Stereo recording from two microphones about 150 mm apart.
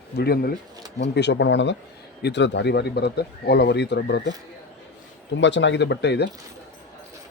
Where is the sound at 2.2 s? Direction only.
90° left.